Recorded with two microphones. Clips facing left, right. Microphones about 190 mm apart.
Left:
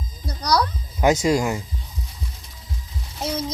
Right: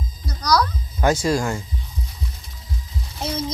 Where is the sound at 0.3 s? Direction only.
30° left (ahead or behind).